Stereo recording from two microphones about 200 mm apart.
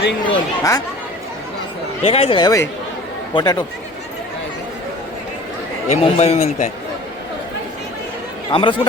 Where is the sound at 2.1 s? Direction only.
30° left (ahead or behind).